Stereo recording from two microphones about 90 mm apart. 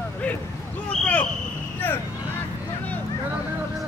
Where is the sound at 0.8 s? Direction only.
15° left (ahead or behind).